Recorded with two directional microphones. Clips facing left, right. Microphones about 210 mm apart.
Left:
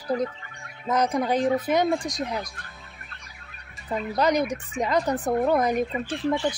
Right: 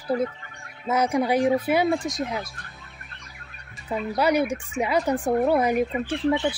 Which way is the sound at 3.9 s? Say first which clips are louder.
Right 1 dB; 10° right (ahead or behind).